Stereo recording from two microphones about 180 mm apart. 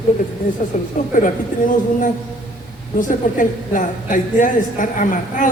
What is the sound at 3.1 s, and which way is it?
A woman's voice, 45° left (ahead or behind).